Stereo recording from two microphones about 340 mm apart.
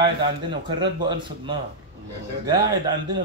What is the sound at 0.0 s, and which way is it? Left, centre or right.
Speech, centre.